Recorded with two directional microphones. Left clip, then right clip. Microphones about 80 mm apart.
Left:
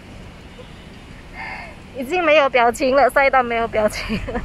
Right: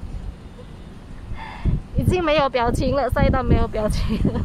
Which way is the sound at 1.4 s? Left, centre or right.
Right.